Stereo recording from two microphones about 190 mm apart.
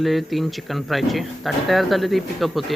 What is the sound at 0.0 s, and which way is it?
Speech, centre (ahead or behind).